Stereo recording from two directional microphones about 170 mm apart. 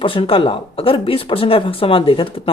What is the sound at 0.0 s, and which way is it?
A woman's voice, 30° left (ahead or behind).